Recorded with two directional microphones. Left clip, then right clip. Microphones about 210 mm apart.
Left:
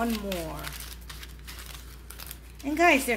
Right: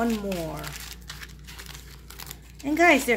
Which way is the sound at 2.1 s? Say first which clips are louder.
Right 3 dB; 35° right (ahead or behind).